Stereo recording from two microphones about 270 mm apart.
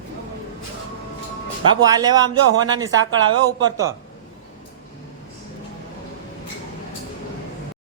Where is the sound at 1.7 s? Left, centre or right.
Centre.